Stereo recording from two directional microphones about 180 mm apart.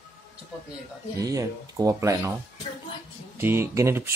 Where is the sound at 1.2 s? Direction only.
20° right (ahead or behind).